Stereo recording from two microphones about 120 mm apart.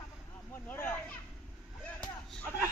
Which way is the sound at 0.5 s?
15° left (ahead or behind).